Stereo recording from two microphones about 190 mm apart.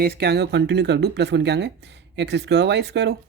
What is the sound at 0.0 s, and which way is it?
Speech, 55° right (ahead or behind).